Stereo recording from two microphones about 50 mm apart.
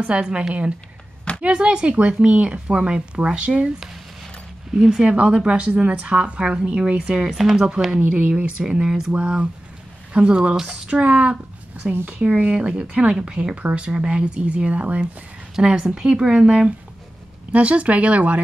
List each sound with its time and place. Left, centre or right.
0.0 s speech: right
4.7 s speech: centre
7.3 s speech: centre
8.1 s speech: right
11.9 s a woman's voice: right
12.2 s speech: right
15.5 s speech: centre